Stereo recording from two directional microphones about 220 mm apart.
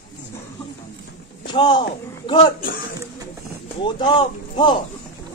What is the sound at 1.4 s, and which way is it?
A man's voice, 20° left (ahead or behind).